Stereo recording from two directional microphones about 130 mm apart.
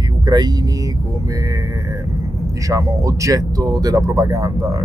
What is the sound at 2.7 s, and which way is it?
Speech, 25° right (ahead or behind).